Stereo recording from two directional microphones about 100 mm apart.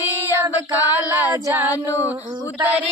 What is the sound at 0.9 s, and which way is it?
Female singing, 25° right (ahead or behind).